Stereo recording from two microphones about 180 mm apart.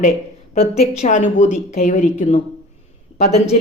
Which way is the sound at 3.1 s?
35° left (ahead or behind).